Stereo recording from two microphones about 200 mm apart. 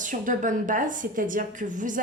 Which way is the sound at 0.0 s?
40° right (ahead or behind).